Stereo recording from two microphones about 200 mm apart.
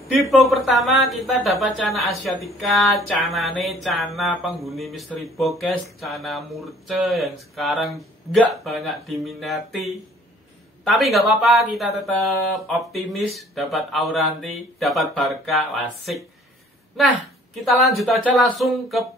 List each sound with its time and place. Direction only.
0.4 s a woman's voice: centre (ahead or behind)